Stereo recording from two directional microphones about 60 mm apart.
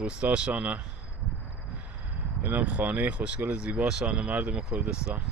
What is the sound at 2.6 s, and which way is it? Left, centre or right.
Speech, right.